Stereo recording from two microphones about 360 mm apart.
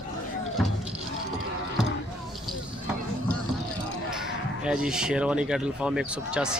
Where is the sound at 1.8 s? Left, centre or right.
Centre.